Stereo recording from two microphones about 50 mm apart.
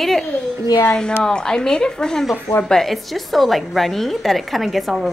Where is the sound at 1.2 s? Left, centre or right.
Centre.